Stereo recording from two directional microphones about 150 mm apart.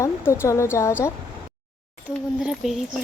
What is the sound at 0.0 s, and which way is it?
Speech, 20° left (ahead or behind).